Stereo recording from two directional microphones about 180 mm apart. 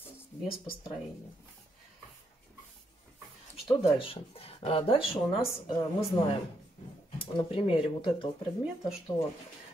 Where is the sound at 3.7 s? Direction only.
30° left (ahead or behind).